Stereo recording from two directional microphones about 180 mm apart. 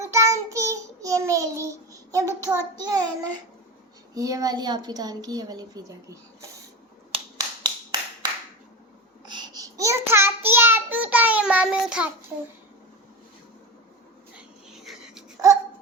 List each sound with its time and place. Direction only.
0.0 s child singing: 15° right (ahead or behind)
2.7 s a woman's voice: 20° right (ahead or behind)
4.1 s a woman's voice: 20° right (ahead or behind)
7.3 s a sound: 20° right (ahead or behind)
9.2 s child singing: 25° right (ahead or behind); by 12.0 s 5° right (ahead or behind)
14.7 s a sound: centre (ahead or behind)